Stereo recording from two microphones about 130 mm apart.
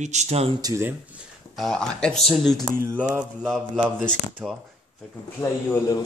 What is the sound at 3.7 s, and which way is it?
Speech, 10° right (ahead or behind).